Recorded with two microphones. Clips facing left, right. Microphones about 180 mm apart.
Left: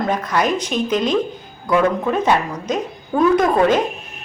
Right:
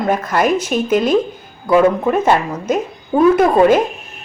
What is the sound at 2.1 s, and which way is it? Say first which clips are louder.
A woman's voice: right 3 dB; 10° right (ahead or behind).